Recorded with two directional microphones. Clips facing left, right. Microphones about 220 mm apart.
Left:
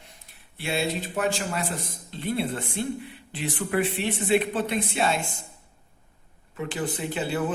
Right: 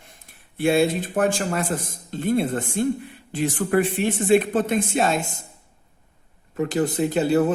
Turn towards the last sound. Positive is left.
turn(degrees=-40)  # may be behind; listen again after turning